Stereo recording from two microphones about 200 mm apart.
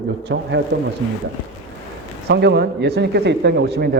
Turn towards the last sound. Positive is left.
turn(degrees=-55)  # may be behind; listen again after turning